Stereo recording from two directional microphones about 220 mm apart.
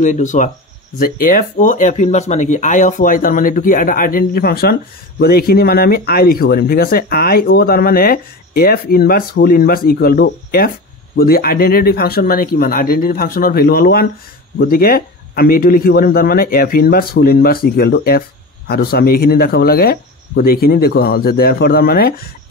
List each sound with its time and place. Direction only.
0.0 s speech: 35° left (ahead or behind)